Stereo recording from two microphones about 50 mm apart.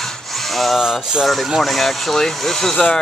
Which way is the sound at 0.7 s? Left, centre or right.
Centre.